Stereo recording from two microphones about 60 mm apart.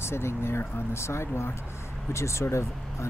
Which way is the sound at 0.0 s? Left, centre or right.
Left.